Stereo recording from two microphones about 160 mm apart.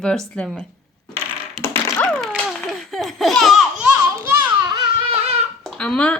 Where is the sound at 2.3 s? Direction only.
Centre (ahead or behind).